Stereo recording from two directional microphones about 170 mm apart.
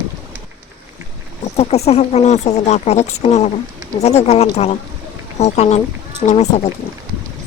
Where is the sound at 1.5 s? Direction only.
40° left (ahead or behind).